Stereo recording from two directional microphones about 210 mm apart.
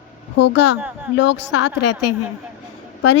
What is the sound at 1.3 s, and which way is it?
Speech, 60° left (ahead or behind).